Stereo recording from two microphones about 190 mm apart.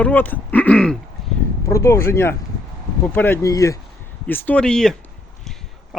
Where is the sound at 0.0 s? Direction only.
10° left (ahead or behind).